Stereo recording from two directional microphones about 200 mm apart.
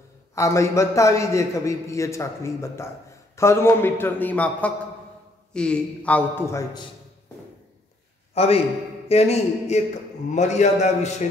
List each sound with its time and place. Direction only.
0.3 s a man's voice: 15° left (ahead or behind)
8.4 s a man's voice: 30° left (ahead or behind)